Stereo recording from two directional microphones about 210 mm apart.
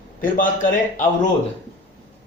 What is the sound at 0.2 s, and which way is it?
Speech, 40° left (ahead or behind).